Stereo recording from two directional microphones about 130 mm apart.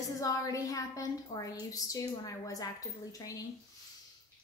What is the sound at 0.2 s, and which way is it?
A woman's voice, 25° left (ahead or behind).